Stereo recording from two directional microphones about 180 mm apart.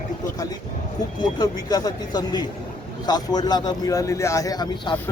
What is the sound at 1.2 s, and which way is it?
A man's voice, 20° left (ahead or behind).